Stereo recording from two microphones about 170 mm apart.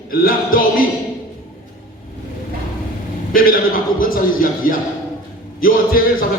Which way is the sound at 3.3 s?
55° left (ahead or behind).